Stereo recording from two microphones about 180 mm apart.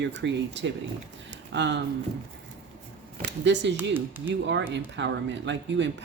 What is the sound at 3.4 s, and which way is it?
Speech, 80° right.